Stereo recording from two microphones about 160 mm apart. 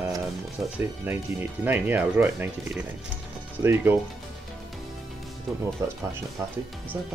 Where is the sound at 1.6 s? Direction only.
10° right (ahead or behind).